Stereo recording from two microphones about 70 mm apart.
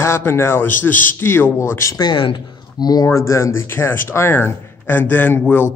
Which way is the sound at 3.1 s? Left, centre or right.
Left.